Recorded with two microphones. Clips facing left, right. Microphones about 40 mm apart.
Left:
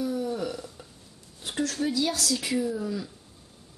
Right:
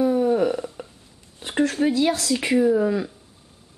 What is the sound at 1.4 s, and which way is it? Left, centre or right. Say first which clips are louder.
Speech: right 8 dB; right.